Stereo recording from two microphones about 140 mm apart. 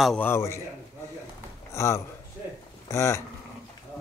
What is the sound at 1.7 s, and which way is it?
A man's voice, 20° left (ahead or behind).